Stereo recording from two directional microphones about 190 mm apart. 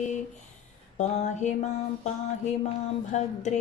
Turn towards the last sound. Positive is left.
turn(degrees=35)  # may be behind; listen again after turning